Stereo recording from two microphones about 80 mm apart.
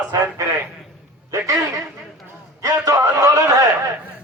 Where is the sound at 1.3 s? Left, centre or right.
Right.